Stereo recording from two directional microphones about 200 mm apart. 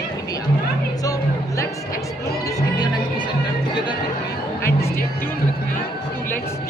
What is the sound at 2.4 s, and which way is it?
Music, 15° left (ahead or behind).